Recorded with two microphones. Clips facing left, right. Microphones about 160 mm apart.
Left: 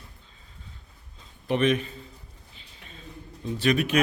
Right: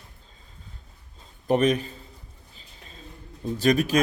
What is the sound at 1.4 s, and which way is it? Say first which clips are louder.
Speech: right 2 dB; 40° right (ahead or behind).